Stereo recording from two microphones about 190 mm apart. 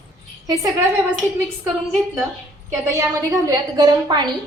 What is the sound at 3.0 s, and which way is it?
A woman's voice, 15° right (ahead or behind).